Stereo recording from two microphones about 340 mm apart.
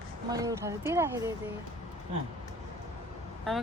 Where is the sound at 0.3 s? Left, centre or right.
Centre.